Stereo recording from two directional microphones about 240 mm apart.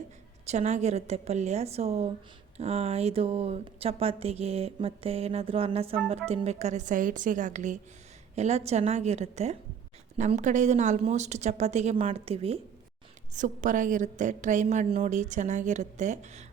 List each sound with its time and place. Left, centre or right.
0.4 s a woman's voice: right